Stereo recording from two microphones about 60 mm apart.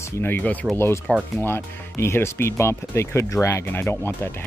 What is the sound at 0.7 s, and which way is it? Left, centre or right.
Speech, left.